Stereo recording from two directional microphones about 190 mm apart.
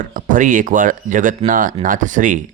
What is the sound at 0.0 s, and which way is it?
Speech, 45° right (ahead or behind).